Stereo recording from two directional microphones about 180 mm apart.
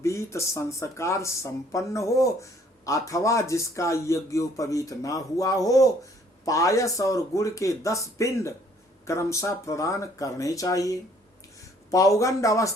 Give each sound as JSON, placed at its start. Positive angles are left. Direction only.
{"t": 0.0, "sound": "speech", "side_deg": 15}